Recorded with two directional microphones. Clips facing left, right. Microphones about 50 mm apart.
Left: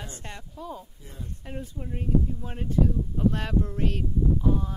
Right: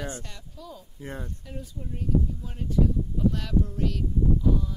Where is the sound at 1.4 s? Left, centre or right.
Left.